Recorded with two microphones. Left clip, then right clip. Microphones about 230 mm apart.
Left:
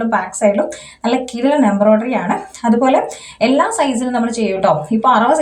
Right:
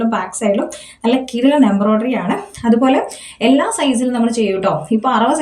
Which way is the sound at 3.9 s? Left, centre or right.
Left.